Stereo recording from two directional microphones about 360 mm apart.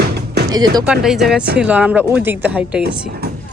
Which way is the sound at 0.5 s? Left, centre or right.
Centre.